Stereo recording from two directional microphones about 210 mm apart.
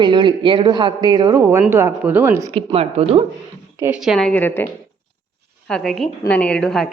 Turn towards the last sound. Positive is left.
turn(degrees=5)  # may be behind; listen again after turning